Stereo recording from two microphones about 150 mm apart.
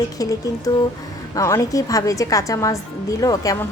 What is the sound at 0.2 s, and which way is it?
A woman's voice, 20° left (ahead or behind).